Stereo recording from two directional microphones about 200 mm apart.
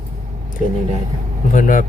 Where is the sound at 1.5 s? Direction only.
40° left (ahead or behind).